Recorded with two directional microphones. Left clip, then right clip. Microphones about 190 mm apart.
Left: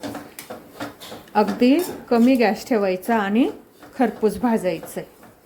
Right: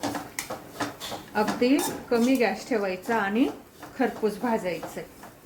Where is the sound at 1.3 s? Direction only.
55° left (ahead or behind).